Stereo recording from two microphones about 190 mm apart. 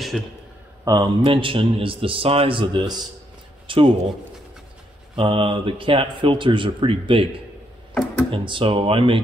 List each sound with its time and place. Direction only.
0.1 s a man's voice: centre (ahead or behind)
0.8 s a man's voice: 25° right (ahead or behind)
5.1 s a man's voice: 30° right (ahead or behind)
8.3 s a man's voice: 25° right (ahead or behind)